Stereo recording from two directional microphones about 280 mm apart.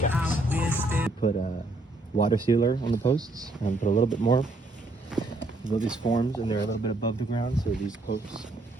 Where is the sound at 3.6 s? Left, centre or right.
Left.